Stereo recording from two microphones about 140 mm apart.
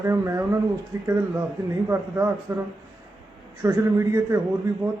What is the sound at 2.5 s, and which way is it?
Speech, 15° right (ahead or behind).